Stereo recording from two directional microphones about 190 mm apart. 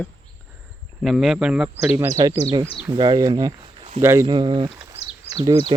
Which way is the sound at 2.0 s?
15° right (ahead or behind).